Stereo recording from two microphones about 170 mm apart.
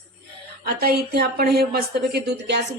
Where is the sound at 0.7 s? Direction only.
65° right (ahead or behind).